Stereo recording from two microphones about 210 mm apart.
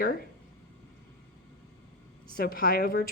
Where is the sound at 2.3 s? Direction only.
45° left (ahead or behind).